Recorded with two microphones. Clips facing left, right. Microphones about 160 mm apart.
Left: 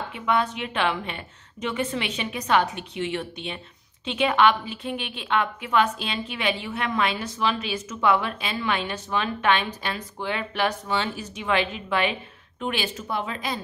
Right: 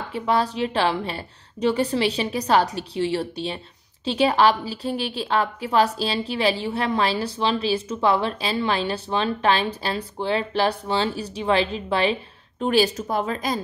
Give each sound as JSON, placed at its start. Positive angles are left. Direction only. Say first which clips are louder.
{"t": 0.1, "sound": "speech", "louder": "right 3 dB", "side_deg": -35}